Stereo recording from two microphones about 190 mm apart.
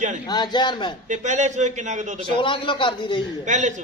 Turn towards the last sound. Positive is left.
turn(degrees=-40)  # may be behind; listen again after turning